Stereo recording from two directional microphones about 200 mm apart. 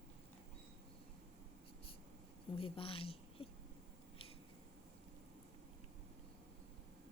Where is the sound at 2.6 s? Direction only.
25° left (ahead or behind).